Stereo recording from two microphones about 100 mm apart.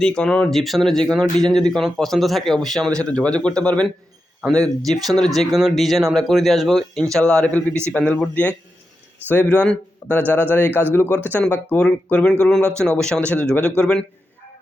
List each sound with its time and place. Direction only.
0.0 s speech: 10° left (ahead or behind)
4.9 s speech: 5° left (ahead or behind)